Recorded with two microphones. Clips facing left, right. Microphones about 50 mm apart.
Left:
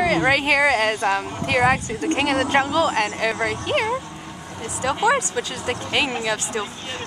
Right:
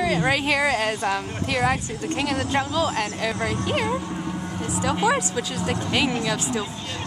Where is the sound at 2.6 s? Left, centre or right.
Left.